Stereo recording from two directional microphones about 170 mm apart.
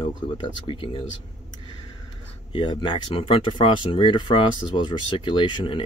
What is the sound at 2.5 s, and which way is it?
Speech, 25° left (ahead or behind).